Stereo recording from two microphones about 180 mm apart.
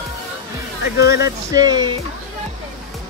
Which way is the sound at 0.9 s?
65° left (ahead or behind).